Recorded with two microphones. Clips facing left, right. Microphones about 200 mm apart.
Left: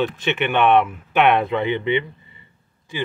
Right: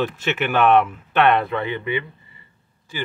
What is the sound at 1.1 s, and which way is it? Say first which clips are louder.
Speech: left 1 dB; 15° left (ahead or behind).